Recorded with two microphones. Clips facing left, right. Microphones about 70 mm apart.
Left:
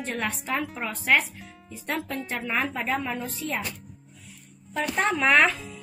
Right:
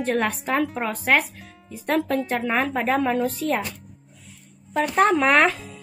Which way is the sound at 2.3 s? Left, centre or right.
Right.